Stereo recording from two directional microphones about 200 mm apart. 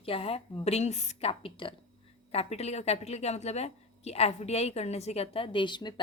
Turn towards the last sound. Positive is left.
turn(degrees=25)  # may be behind; listen again after turning